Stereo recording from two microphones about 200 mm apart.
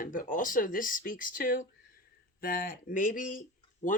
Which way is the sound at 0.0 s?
45° left (ahead or behind).